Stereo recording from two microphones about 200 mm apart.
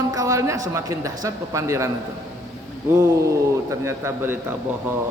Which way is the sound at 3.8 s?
15° right (ahead or behind).